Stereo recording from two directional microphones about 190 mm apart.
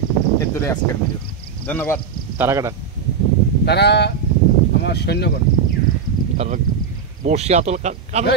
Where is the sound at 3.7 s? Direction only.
60° left (ahead or behind).